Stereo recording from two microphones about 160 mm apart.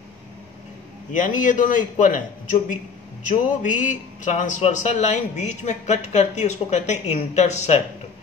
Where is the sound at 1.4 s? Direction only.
55° left (ahead or behind).